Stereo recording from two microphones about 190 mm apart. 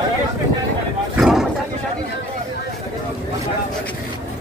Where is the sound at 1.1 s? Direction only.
Centre (ahead or behind).